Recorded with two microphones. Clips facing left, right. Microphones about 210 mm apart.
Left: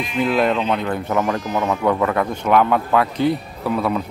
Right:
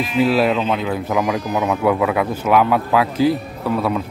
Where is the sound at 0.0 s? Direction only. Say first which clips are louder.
Right 3 dB; 5° right (ahead or behind).